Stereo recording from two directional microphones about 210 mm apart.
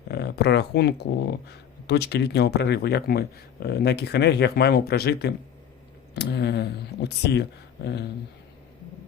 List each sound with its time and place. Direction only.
0.1 s speech: 50° left (ahead or behind)